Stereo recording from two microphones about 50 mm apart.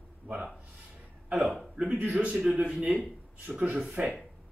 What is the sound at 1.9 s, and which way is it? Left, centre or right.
Speech, right.